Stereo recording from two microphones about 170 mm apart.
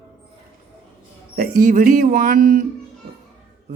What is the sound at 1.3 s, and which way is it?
Speech, 55° right (ahead or behind).